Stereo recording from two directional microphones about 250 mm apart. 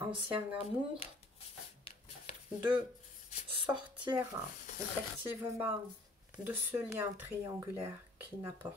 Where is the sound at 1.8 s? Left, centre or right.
Left.